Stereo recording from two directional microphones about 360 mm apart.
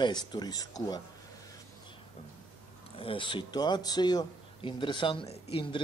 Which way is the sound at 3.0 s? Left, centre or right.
Centre.